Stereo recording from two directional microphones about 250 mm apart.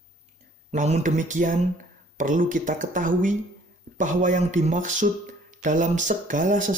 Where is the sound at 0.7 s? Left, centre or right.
Right.